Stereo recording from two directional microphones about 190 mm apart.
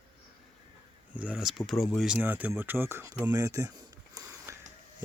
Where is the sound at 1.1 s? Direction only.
5° right (ahead or behind).